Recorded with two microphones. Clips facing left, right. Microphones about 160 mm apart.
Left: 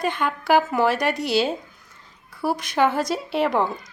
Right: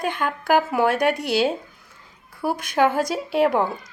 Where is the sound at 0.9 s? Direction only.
55° right (ahead or behind).